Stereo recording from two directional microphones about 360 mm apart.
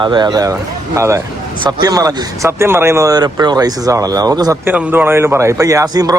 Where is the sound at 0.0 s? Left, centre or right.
Centre.